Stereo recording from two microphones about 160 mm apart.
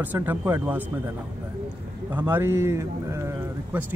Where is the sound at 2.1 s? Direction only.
10° right (ahead or behind).